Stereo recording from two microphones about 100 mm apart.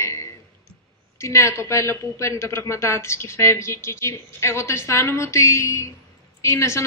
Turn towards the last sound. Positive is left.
turn(degrees=30)  # may be behind; listen again after turning